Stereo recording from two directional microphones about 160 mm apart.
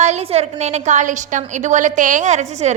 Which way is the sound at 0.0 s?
40° right (ahead or behind).